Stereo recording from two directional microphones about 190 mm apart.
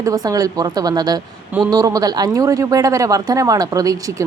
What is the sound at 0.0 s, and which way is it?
Speech, 20° right (ahead or behind).